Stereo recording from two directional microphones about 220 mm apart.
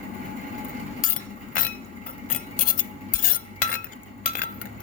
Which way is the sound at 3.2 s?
40° left (ahead or behind).